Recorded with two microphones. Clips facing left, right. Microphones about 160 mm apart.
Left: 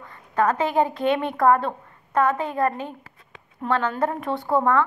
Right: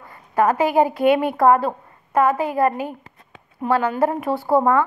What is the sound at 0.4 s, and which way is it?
Speech, 10° right (ahead or behind).